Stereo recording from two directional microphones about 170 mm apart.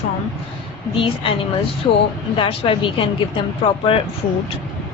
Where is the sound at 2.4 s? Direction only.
30° left (ahead or behind).